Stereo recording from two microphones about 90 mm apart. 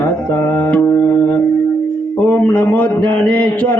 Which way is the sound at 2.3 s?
20° left (ahead or behind).